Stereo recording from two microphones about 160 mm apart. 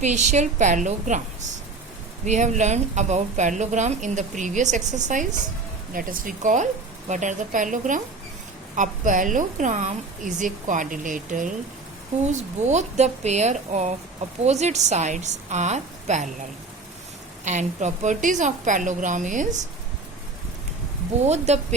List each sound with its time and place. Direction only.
0.0 s a woman's voice: 50° right (ahead or behind)
2.2 s a woman's voice: 50° right (ahead or behind)
17.4 s a woman's voice: 50° right (ahead or behind)
21.2 s a woman's voice: 45° right (ahead or behind)